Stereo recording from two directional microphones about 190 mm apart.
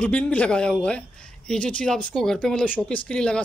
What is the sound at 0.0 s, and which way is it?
Speech, 5° left (ahead or behind).